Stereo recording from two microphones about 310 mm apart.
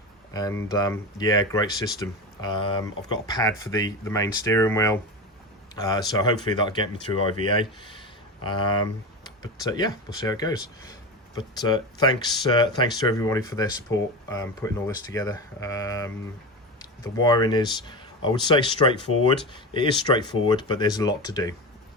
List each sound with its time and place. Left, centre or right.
0.3 s speech: centre